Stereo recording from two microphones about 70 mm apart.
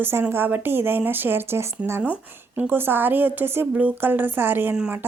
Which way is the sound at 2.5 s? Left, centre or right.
Right.